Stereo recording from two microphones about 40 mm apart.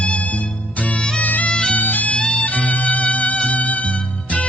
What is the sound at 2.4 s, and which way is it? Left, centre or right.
Music, left.